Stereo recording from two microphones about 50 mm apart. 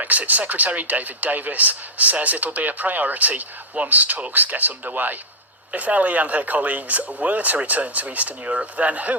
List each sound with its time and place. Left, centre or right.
0.0 s speech: right